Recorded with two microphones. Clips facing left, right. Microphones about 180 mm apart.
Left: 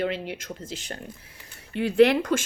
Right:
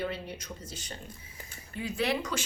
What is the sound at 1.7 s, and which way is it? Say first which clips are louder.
Speech: left 12 dB; 65° left (ahead or behind).